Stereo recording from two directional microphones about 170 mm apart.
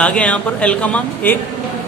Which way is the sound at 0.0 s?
10° left (ahead or behind).